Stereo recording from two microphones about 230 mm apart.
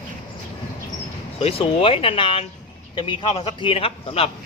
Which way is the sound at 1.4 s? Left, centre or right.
Left.